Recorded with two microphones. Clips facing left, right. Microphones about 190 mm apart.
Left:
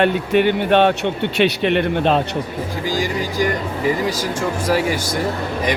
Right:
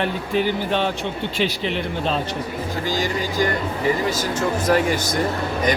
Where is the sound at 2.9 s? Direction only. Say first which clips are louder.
Left 2 dB; 15° left (ahead or behind).